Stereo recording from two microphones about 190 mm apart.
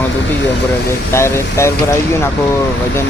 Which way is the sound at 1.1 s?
15° left (ahead or behind).